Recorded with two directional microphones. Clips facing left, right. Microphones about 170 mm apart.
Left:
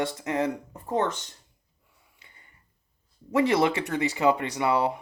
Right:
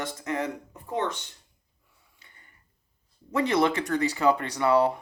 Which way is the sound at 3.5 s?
30° left (ahead or behind).